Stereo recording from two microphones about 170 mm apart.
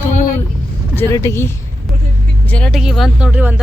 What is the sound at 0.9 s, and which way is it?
Vehicle, 15° left (ahead or behind).